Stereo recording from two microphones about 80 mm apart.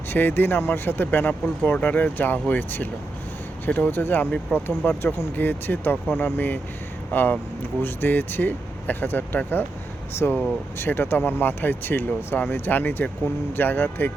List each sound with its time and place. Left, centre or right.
0.1 s speech: left